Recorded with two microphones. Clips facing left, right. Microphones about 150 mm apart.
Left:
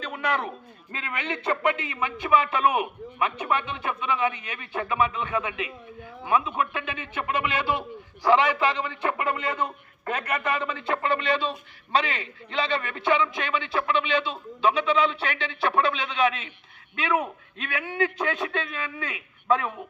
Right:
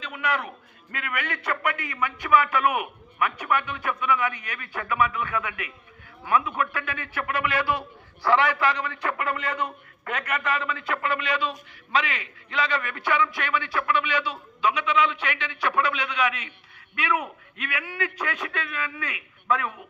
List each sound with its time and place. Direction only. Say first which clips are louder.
0.0 s a man's voice: left 1 dB; 35° left (ahead or behind)